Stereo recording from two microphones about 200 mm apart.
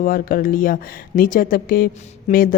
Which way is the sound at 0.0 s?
45° left (ahead or behind).